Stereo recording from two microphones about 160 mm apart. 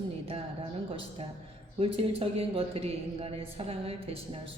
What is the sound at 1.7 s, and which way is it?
A man's voice, 35° right (ahead or behind).